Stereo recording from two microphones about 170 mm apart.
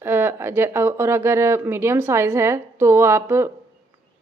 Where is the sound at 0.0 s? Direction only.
15° right (ahead or behind).